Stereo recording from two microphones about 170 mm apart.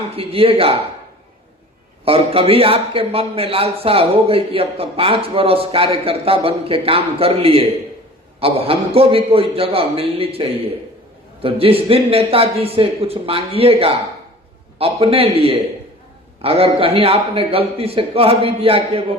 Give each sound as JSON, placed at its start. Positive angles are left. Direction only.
{"t": 0.1, "sound": "a man's voice", "side_deg": -35}
{"t": 2.0, "sound": "a man's voice", "side_deg": -35}